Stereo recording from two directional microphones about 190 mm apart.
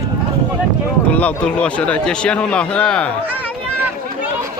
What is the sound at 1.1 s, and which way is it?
A man's voice, 5° left (ahead or behind).